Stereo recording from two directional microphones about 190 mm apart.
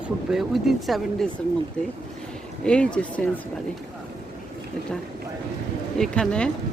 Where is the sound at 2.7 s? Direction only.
5° left (ahead or behind).